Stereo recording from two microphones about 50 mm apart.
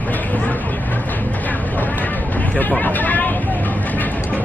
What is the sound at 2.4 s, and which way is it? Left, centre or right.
Vehicle, left.